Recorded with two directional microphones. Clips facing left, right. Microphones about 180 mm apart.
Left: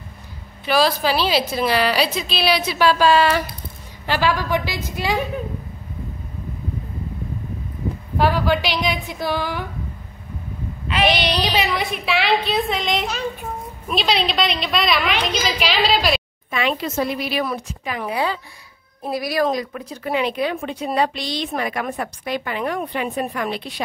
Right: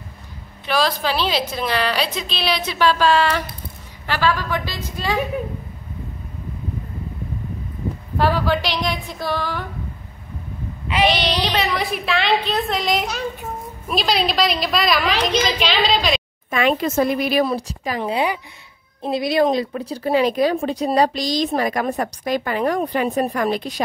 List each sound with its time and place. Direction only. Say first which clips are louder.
0.7 s a woman's voice: left 2 dB; 5° left (ahead or behind)
8.2 s a woman's voice: even; 5° left (ahead or behind)
11.4 s a woman's voice: even; 5° left (ahead or behind)
16.4 s speech: right 4 dB; 45° right (ahead or behind)
17.5 s speech: right 3 dB; 35° right (ahead or behind)
18.1 s a woman's voice: right 2 dB; 15° right (ahead or behind); by 23.8 s 40° right (ahead or behind)